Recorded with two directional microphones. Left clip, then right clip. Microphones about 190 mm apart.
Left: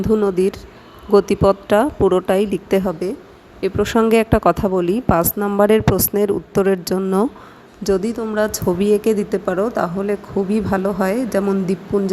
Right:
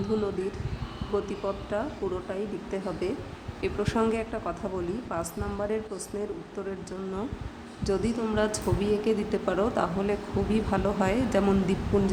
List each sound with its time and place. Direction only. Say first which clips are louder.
1.1 s speech: left 17 dB; 50° left (ahead or behind)
7.9 s a woman's voice: left 9 dB; 35° left (ahead or behind)